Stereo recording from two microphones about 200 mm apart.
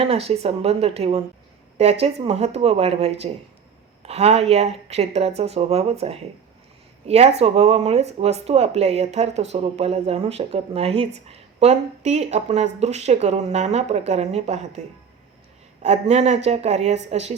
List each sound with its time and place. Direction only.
0.0 s speech: 30° right (ahead or behind)
15.8 s speech: 30° right (ahead or behind)